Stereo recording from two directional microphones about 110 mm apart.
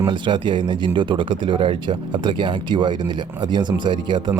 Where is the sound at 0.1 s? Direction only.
45° right (ahead or behind).